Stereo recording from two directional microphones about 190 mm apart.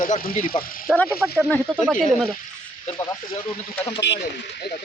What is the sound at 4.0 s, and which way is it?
Speech, 65° left (ahead or behind).